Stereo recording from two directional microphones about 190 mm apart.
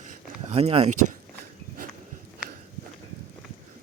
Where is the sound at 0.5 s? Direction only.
30° right (ahead or behind).